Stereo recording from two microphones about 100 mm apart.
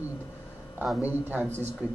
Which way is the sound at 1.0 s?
20° right (ahead or behind).